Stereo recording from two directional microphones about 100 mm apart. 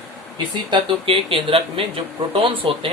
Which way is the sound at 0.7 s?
65° right (ahead or behind).